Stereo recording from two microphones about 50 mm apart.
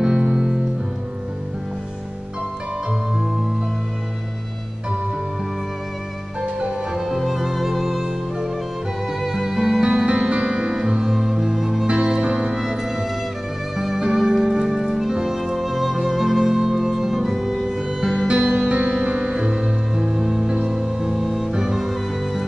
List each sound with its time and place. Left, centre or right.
0.0 s music: centre
6.9 s music: centre
12.5 s music: centre